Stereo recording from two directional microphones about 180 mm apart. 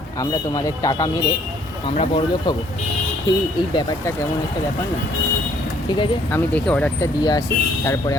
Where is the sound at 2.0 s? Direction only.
30° left (ahead or behind).